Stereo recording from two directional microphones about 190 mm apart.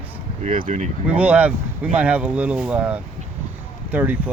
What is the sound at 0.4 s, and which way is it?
Speech, 40° right (ahead or behind).